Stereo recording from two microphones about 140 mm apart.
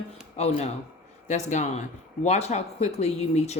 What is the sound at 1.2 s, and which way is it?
Speech, 55° left (ahead or behind).